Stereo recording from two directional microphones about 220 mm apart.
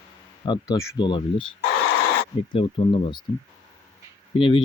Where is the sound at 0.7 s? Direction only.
15° left (ahead or behind).